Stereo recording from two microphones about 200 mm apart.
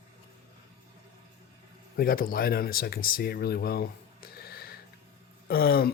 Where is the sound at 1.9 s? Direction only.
45° left (ahead or behind).